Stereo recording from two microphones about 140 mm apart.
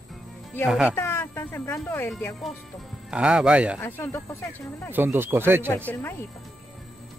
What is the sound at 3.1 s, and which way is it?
Speech, 5° right (ahead or behind).